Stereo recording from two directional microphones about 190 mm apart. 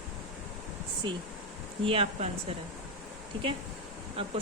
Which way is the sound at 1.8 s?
30° right (ahead or behind).